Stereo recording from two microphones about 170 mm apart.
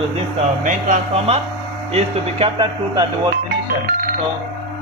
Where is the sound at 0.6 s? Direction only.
45° right (ahead or behind).